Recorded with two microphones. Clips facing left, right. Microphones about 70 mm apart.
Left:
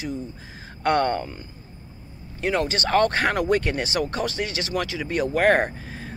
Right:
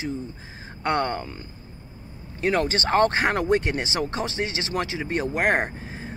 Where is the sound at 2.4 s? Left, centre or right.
Right.